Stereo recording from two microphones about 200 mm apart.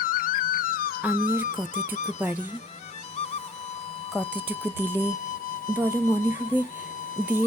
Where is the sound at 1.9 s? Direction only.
35° left (ahead or behind).